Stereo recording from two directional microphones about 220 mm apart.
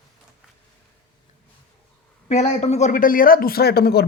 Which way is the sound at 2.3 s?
30° left (ahead or behind).